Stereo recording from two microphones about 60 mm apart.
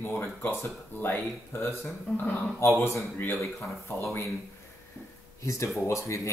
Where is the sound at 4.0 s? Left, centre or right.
Left.